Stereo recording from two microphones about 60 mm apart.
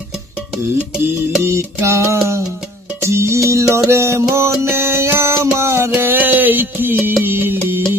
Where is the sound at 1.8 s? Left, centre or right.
Right.